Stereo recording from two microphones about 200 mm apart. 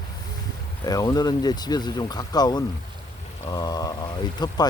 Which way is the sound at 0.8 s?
20° left (ahead or behind).